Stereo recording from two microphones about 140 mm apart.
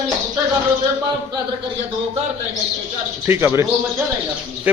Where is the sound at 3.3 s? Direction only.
20° right (ahead or behind).